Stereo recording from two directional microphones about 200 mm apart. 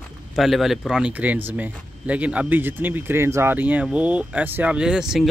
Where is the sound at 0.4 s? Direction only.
Centre (ahead or behind).